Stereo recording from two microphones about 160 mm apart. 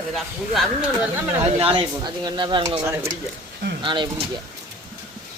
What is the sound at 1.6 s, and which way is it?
Speech, 35° right (ahead or behind).